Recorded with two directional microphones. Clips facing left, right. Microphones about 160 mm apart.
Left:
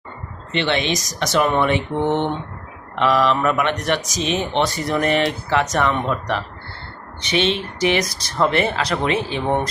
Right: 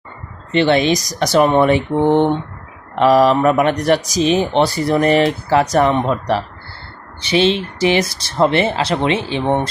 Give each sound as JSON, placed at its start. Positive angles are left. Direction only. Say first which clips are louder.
{"t": 0.5, "sound": "speech", "louder": "right 7 dB", "side_deg": -40}